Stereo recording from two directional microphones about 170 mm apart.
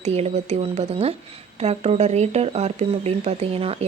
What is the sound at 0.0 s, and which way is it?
Speech, 40° right (ahead or behind).